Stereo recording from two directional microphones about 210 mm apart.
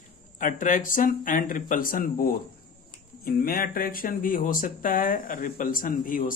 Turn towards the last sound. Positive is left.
turn(degrees=40)  # may be behind; listen again after turning